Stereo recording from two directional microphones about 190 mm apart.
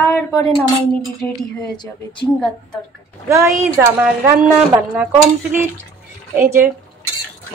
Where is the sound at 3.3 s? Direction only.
15° right (ahead or behind).